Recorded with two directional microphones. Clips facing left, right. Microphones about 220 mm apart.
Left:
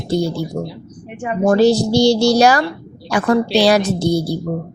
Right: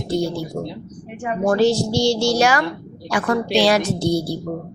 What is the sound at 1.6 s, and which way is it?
Speech, 35° left (ahead or behind).